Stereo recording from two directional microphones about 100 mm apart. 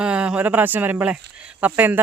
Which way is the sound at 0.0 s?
10° right (ahead or behind).